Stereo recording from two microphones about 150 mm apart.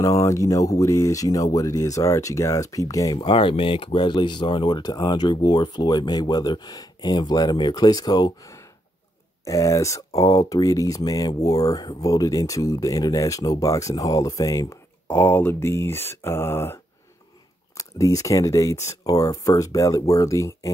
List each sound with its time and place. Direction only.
0.0 s speech: 20° left (ahead or behind)
3.2 s speech: 35° left (ahead or behind)